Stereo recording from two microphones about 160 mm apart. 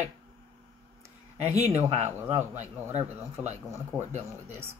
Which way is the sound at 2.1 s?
15° right (ahead or behind).